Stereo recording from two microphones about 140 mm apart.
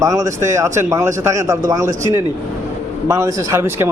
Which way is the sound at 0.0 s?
20° right (ahead or behind).